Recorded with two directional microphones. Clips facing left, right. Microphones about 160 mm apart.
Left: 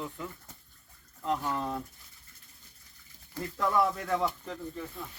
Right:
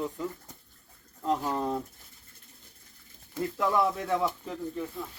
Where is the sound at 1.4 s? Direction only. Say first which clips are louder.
Right 3 dB; 25° right (ahead or behind).